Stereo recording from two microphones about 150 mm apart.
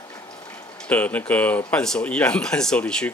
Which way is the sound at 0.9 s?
10° left (ahead or behind).